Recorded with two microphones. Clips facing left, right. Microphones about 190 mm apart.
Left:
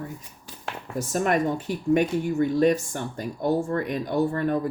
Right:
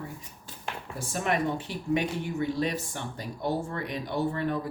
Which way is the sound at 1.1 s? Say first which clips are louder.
Left 5 dB; 45° left (ahead or behind).